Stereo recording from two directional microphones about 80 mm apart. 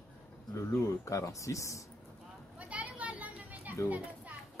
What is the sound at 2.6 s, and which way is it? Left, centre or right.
Children playing, centre.